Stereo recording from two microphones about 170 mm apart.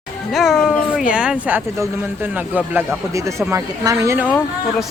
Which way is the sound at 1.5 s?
10° right (ahead or behind).